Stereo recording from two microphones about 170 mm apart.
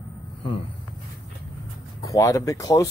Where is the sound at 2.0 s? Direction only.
20° left (ahead or behind).